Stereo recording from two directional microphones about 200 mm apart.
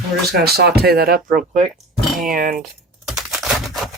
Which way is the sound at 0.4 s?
50° right (ahead or behind).